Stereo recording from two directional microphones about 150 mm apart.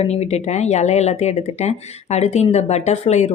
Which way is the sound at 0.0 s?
45° left (ahead or behind).